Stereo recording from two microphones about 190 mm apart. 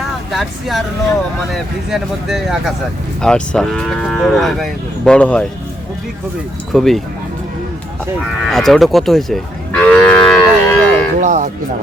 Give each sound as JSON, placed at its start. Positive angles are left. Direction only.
{"t": 0.3, "sound": "cattle", "side_deg": 0}
{"t": 1.9, "sound": "cattle", "side_deg": 0}
{"t": 6.7, "sound": "cattle", "side_deg": 0}
{"t": 8.4, "sound": "livestock", "side_deg": 0}
{"t": 11.2, "sound": "speech", "side_deg": -40}